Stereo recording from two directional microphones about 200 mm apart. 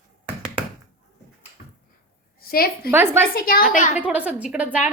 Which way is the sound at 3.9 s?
5° right (ahead or behind).